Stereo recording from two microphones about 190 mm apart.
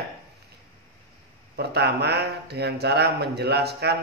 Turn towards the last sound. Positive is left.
turn(degrees=-60)  # may be behind; listen again after turning